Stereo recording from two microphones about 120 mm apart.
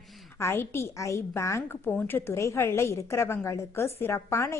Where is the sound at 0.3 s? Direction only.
20° left (ahead or behind).